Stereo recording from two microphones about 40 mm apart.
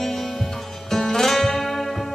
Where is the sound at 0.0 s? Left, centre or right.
Centre.